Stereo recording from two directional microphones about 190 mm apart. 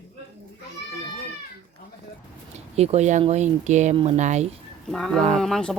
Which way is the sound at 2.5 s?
35° right (ahead or behind).